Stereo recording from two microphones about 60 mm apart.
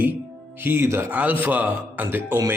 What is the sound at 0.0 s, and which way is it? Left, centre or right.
Music, right.